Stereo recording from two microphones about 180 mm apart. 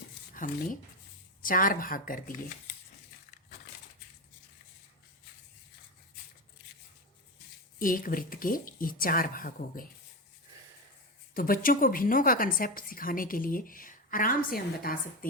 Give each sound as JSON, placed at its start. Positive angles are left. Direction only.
{"t": 0.3, "sound": "a woman's voice", "side_deg": 50}
{"t": 7.8, "sound": "a woman's voice", "side_deg": 50}
{"t": 11.3, "sound": "a woman's voice", "side_deg": 50}